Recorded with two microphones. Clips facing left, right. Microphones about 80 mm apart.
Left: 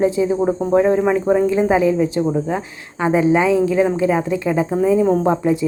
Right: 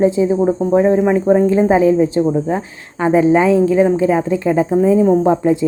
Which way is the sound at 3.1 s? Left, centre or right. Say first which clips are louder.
Right 3 dB; right.